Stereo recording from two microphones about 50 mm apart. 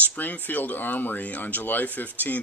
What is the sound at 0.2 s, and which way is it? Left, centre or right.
Speech, left.